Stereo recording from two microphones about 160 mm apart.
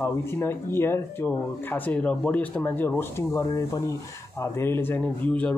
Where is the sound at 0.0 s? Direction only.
15° left (ahead or behind).